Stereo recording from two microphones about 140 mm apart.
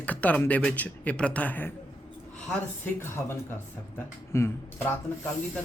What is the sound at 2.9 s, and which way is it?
Speech, 15° left (ahead or behind).